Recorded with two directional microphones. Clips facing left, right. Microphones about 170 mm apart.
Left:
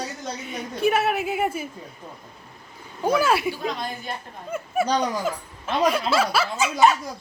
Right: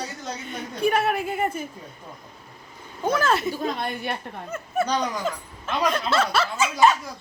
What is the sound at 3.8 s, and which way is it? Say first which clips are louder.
Speech: right 3 dB; 65° right (ahead or behind).